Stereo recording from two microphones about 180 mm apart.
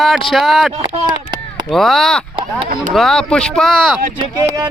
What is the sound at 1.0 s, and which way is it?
Chop, 25° right (ahead or behind).